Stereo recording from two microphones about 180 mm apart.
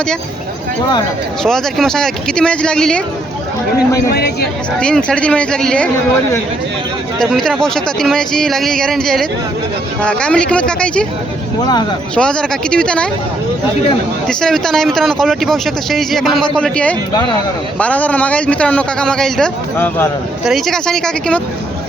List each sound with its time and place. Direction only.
1.5 s speech: centre (ahead or behind)
4.1 s speech: 60° left (ahead or behind)
4.8 s speech: 5° left (ahead or behind)
7.2 s speech: centre (ahead or behind)
11.6 s speech: 25° left (ahead or behind)
12.1 s speech: 5° left (ahead or behind)
14.3 s a man's voice: 5° left (ahead or behind)
20.4 s speech: centre (ahead or behind)